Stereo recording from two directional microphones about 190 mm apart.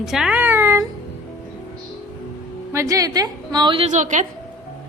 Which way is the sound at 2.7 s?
15° right (ahead or behind).